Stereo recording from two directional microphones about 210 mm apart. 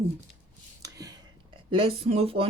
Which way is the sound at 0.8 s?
15° right (ahead or behind).